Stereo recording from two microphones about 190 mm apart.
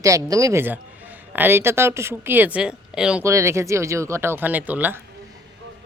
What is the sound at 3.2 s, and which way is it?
A man's voice, 15° right (ahead or behind).